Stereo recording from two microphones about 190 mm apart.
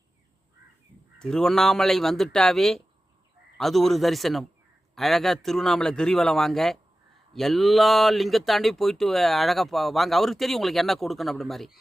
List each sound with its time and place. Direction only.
1.2 s speech: 5° left (ahead or behind)